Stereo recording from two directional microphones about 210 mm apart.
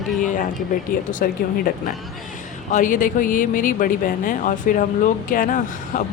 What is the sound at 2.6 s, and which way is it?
Speech, 40° left (ahead or behind).